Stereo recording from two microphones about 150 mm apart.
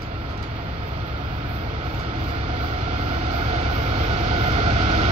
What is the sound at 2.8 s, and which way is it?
Vehicle, 45° right (ahead or behind).